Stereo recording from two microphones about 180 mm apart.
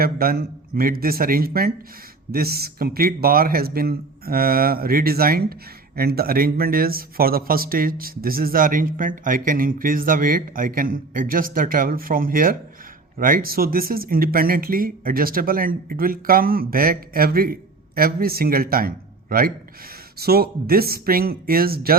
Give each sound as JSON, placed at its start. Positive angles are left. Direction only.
{"t": 0.0, "sound": "a man's voice", "side_deg": -55}